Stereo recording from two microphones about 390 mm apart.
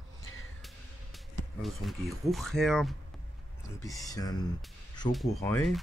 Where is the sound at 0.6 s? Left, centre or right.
Centre.